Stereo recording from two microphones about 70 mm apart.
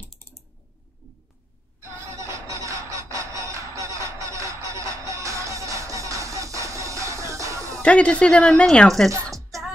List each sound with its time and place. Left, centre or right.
2.1 s music: right
7.8 s speech: centre